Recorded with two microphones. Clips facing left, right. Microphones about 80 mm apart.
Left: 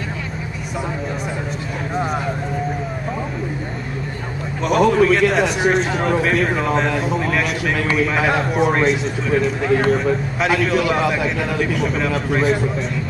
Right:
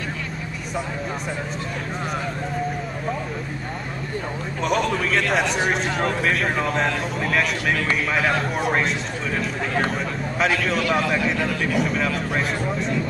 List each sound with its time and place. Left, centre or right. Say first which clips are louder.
4.6 s a man's voice: left 8 dB; centre